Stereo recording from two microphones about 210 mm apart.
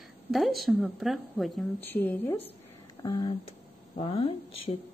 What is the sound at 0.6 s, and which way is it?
Speech, 5° right (ahead or behind).